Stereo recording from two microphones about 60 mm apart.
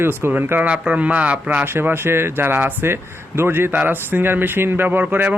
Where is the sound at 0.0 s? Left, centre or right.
Right.